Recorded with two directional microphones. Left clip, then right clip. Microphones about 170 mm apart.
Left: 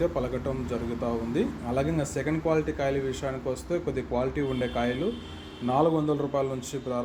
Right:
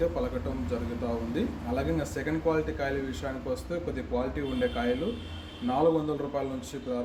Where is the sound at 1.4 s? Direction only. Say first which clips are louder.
Left 6 dB; 35° left (ahead or behind).